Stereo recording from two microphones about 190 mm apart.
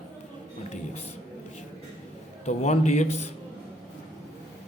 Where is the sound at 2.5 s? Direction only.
35° left (ahead or behind).